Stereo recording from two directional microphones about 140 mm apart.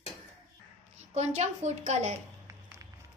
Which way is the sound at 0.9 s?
55° right (ahead or behind).